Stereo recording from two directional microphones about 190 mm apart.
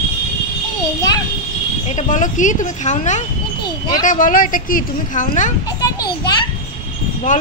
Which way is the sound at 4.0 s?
45° left (ahead or behind).